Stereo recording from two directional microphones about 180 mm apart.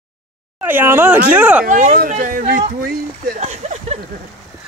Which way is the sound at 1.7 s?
50° right (ahead or behind).